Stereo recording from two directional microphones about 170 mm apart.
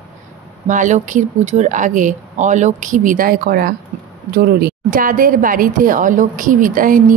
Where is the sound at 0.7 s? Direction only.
45° right (ahead or behind).